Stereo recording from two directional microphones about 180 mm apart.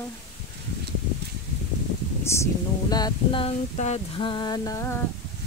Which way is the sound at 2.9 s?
25° left (ahead or behind).